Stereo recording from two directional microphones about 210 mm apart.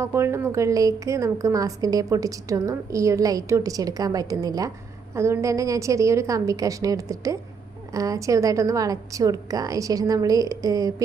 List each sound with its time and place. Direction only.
0.0 s a woman's voice: 10° right (ahead or behind)